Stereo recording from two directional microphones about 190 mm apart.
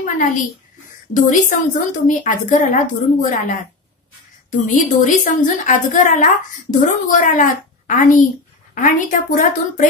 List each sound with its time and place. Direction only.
0.0 s a child's voice: 40° left (ahead or behind)